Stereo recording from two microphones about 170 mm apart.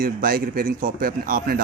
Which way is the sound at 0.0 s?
60° right (ahead or behind).